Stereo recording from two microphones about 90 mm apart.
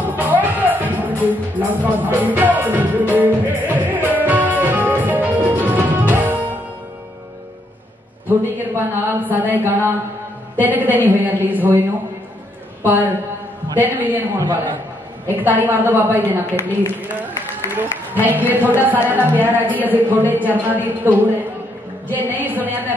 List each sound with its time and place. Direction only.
0.0 s music: 20° right (ahead or behind)
8.3 s speech: 25° right (ahead or behind)
12.8 s speech: 20° right (ahead or behind)
15.2 s speech: 20° right (ahead or behind)
16.5 s speech: 30° left (ahead or behind)
17.1 s a sound: 20° right (ahead or behind)
18.4 s a woman's voice: 20° right (ahead or behind)